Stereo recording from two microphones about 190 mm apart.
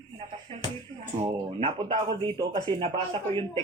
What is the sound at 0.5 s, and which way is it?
Music, 30° right (ahead or behind).